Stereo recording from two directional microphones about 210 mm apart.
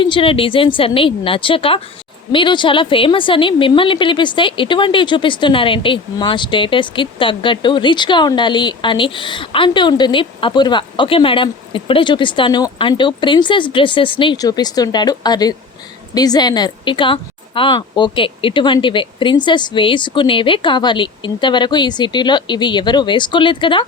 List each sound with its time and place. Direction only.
0.0 s a woman's voice: 25° left (ahead or behind)